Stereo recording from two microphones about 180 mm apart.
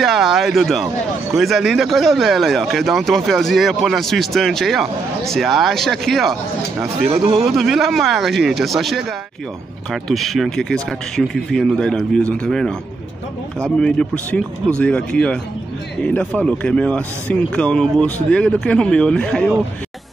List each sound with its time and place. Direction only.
0.0 s speech: centre (ahead or behind)
7.1 s speech: 30° right (ahead or behind)
7.4 s speech: centre (ahead or behind)
10.0 s speech: centre (ahead or behind)